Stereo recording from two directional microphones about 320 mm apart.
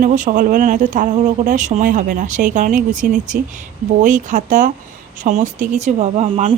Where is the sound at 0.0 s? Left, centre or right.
Right.